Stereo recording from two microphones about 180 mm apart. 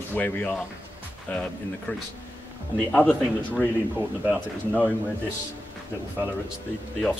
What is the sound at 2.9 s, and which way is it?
Speech, 5° left (ahead or behind).